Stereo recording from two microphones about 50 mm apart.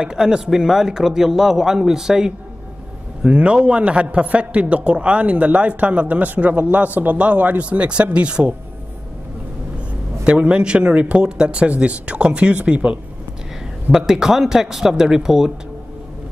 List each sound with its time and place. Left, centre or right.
0.0 s speech: centre
3.3 s a man's voice: right
10.2 s a man's voice: right
13.9 s speech: centre